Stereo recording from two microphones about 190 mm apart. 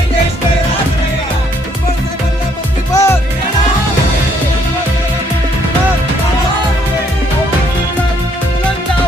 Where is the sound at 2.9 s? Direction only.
15° left (ahead or behind).